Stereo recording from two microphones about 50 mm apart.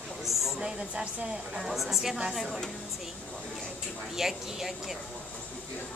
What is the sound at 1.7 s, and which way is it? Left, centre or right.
Speech, centre.